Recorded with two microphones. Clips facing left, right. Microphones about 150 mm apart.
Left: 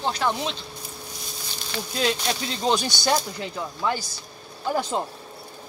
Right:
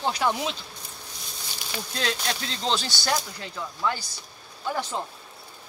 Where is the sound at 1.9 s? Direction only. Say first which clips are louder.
Left 4 dB; 10° left (ahead or behind).